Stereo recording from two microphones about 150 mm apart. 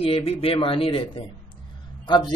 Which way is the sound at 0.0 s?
40° left (ahead or behind).